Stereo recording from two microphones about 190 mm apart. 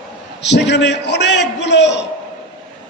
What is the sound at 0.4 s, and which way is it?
A man's voice, 65° left (ahead or behind).